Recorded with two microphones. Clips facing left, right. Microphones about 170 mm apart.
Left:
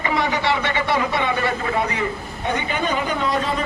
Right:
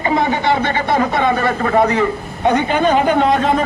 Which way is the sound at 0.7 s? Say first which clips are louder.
Right 5 dB; 45° right (ahead or behind).